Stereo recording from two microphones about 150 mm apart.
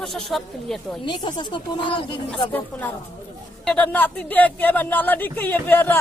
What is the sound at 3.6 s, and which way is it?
Speech, 10° left (ahead or behind).